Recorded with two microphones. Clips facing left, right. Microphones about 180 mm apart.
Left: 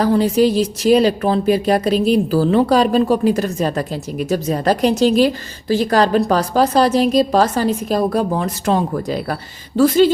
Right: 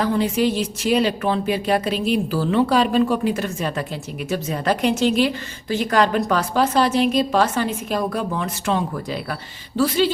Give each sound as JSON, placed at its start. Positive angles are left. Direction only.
{"t": 0.0, "sound": "a woman's voice", "side_deg": 40}